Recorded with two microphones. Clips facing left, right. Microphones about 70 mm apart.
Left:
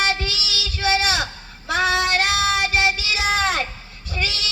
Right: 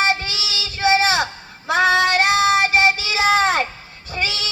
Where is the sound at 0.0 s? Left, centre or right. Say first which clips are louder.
Right 2 dB; right.